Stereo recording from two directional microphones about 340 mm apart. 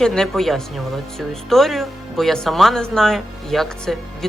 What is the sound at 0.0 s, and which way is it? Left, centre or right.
Speech, centre.